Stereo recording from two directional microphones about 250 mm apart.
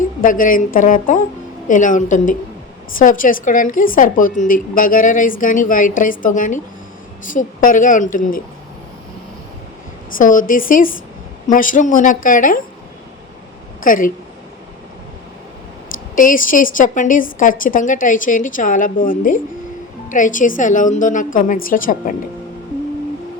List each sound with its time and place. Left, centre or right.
0.2 s a woman's voice: left
10.2 s a woman's voice: left
13.8 s a woman's voice: left
16.1 s a woman's voice: left